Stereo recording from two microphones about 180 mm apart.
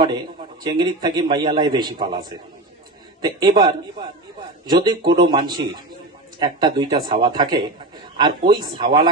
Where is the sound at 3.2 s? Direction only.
25° right (ahead or behind).